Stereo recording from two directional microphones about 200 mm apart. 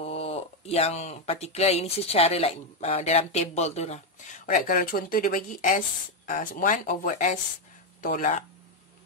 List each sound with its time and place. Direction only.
0.0 s speech: 30° left (ahead or behind)